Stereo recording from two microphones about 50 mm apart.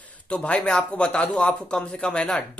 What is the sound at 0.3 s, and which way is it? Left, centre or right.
Speech, left.